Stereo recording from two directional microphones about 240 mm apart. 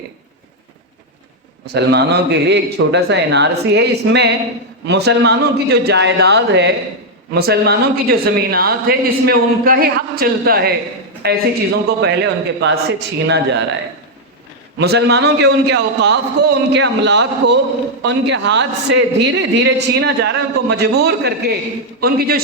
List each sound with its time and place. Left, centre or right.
1.6 s a man's voice: right
14.8 s a man's voice: right